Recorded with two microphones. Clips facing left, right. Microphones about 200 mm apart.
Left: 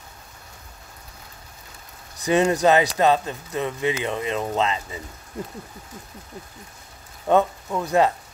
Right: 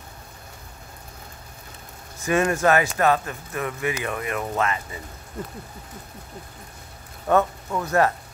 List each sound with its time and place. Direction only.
2.2 s speech: 20° left (ahead or behind)
7.2 s speech: 15° left (ahead or behind)